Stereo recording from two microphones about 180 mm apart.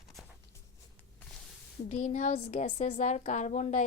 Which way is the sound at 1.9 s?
40° left (ahead or behind).